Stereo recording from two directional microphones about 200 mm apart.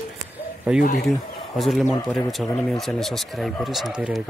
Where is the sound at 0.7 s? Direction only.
5° right (ahead or behind).